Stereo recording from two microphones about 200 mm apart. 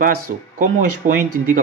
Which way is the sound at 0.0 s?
40° right (ahead or behind).